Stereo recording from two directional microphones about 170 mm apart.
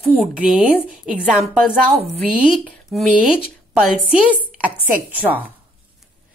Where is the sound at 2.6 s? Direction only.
5° left (ahead or behind).